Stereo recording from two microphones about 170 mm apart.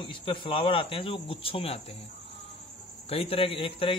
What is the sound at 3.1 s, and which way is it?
Speech, 35° left (ahead or behind).